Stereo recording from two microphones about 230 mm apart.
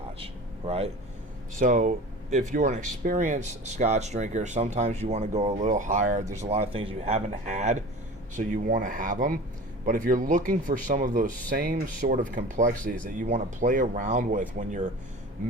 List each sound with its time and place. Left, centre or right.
0.2 s air conditioning: right
1.5 s speech: right